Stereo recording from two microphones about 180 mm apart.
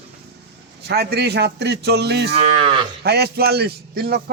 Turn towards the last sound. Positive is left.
turn(degrees=-60)  # may be behind; listen again after turning